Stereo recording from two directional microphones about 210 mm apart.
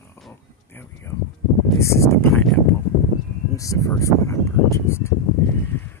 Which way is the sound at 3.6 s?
15° left (ahead or behind).